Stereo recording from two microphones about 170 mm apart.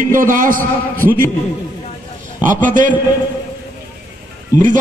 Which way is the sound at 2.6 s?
50° right (ahead or behind).